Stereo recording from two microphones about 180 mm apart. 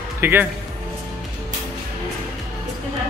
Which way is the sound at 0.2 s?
10° right (ahead or behind).